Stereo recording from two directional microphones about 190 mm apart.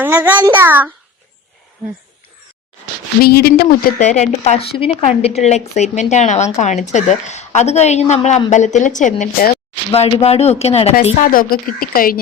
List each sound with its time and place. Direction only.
0.0 s a child's voice: 10° right (ahead or behind)
3.2 s speech: 55° left (ahead or behind)
3.9 s a woman's voice: 40° left (ahead or behind)
10.2 s a woman's voice: 35° left (ahead or behind)
11.0 s a woman's voice: 45° left (ahead or behind)